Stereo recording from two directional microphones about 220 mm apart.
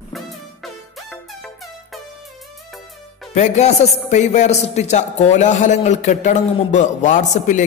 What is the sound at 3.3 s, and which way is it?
A man's voice, 30° left (ahead or behind).